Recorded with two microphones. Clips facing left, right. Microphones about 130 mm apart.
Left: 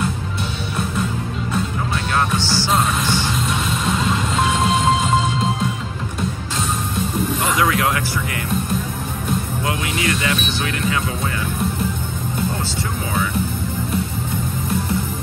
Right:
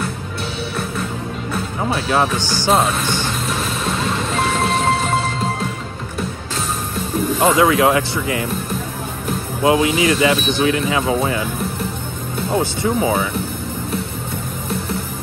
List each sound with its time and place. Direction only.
2.3 s speech: 15° right (ahead or behind)
7.3 s speech: 25° right (ahead or behind)
9.6 s speech: 25° right (ahead or behind)